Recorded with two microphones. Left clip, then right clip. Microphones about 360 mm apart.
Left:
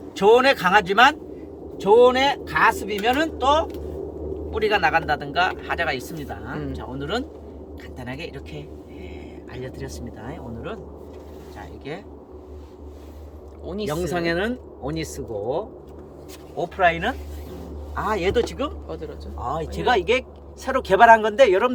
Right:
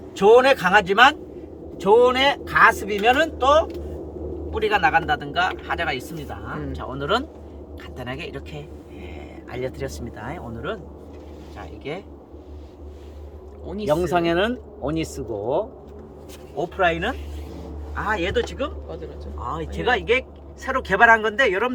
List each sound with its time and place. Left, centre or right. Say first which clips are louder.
0.2 s speech: right 2 dB; centre
11.9 s speech: right 3 dB; centre
13.7 s speech: right 4 dB; centre
16.6 s speech: left 1 dB; centre
17.9 s a man's voice: left 1 dB; left